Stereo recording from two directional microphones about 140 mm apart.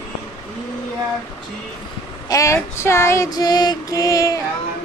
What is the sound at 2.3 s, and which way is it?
Female singing, 20° left (ahead or behind).